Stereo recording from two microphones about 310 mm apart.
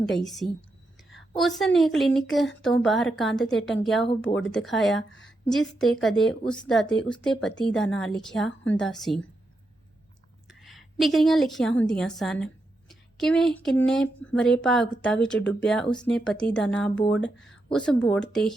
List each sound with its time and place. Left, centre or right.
0.2 s speech: centre
4.0 s speech: centre
4.4 s speech: centre
10.5 s a woman's voice: centre